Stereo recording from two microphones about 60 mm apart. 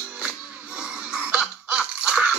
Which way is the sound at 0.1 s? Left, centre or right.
Centre.